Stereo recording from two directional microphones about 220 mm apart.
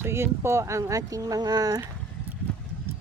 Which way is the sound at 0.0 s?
10° right (ahead or behind).